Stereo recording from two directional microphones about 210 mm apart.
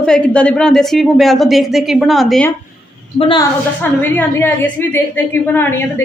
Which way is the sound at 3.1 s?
25° left (ahead or behind).